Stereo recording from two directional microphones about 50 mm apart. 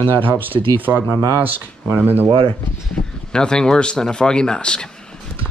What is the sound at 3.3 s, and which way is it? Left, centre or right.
Speech, centre.